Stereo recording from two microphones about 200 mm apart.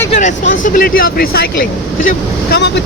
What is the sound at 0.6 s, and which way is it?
Speech, 45° left (ahead or behind).